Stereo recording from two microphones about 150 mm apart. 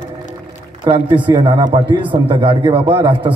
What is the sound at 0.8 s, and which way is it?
A man's voice, 35° right (ahead or behind).